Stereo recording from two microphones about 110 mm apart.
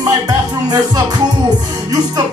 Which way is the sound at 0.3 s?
35° right (ahead or behind).